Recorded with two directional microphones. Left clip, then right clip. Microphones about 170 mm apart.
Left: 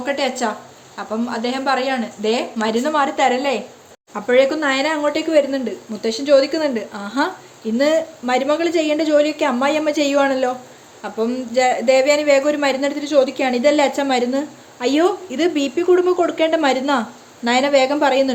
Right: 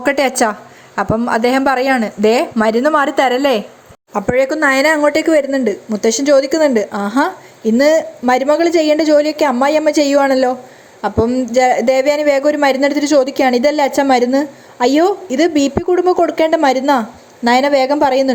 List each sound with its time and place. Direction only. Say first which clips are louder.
0.0 s speech: right 7 dB; 50° right (ahead or behind); by 18.3 s 30° right (ahead or behind)